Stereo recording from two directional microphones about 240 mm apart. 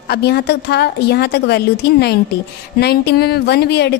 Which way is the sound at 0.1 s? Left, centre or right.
Left.